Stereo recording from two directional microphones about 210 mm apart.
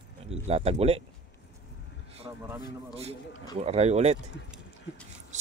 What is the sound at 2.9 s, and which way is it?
Speech, 30° right (ahead or behind).